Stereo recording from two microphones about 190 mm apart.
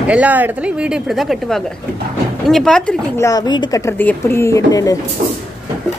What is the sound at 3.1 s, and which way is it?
Speech, 15° left (ahead or behind).